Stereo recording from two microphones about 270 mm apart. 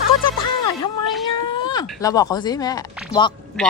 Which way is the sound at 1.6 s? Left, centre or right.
Centre.